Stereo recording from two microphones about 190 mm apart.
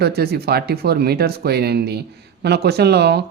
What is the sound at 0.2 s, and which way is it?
Speech, 55° right (ahead or behind).